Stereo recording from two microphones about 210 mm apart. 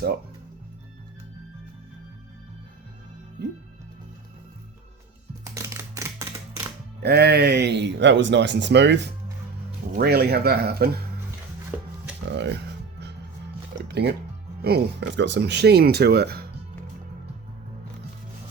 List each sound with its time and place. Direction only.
5.5 s a sound: 15° right (ahead or behind)
7.0 s speech: 50° right (ahead or behind)
11.7 s a sound: 5° right (ahead or behind)
12.3 s speech: 55° right (ahead or behind)
13.8 s music: 50° right (ahead or behind)
14.6 s speech: 50° right (ahead or behind)